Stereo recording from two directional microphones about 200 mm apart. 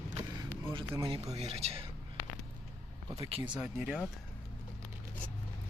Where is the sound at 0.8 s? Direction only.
15° right (ahead or behind).